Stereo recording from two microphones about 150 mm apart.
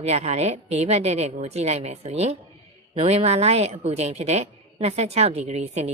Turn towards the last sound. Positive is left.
turn(degrees=-45)  # may be behind; listen again after turning